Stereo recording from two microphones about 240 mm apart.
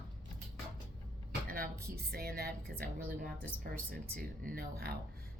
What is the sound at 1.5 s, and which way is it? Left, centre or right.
A woman's voice, right.